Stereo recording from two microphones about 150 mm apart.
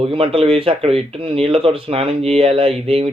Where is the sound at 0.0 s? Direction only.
40° right (ahead or behind).